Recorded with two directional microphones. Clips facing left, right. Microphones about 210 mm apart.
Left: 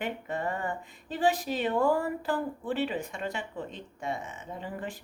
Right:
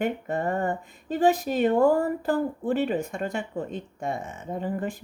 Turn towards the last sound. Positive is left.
turn(degrees=-45)  # may be behind; listen again after turning